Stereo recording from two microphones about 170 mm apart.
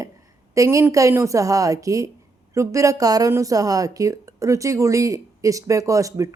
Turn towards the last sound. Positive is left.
turn(degrees=-20)  # may be behind; listen again after turning